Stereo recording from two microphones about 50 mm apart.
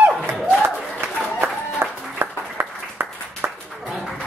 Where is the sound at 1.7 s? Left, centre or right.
Right.